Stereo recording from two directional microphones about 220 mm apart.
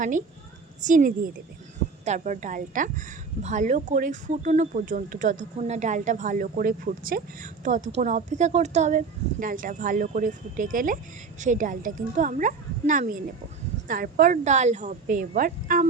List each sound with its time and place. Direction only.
0.8 s speech: 35° right (ahead or behind)